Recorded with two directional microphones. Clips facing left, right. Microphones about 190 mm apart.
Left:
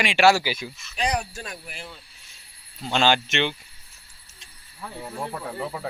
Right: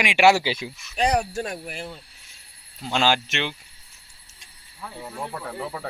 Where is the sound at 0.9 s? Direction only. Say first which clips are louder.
Right 5 dB; 55° right (ahead or behind).